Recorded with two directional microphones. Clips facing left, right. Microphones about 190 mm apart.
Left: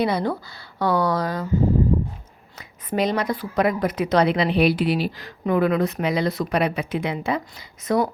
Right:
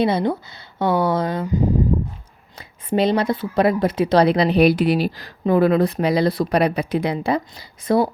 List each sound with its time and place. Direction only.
0.0 s a woman's voice: 25° right (ahead or behind)